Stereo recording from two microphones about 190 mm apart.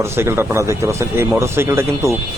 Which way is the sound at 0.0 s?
15° right (ahead or behind).